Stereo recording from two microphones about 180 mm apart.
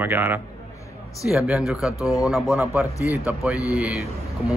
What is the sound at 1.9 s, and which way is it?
Speech, 20° left (ahead or behind).